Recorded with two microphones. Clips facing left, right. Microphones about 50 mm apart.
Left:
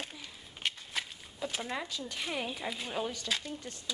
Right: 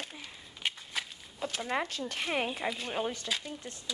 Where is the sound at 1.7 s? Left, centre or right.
Right.